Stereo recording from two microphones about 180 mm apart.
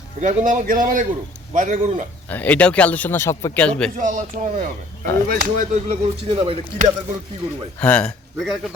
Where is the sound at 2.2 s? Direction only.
10° left (ahead or behind).